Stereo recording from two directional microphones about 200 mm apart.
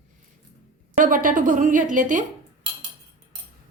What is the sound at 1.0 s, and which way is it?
A woman's voice, 45° right (ahead or behind).